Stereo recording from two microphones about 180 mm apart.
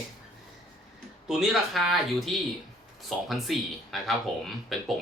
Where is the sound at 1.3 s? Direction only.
Centre (ahead or behind).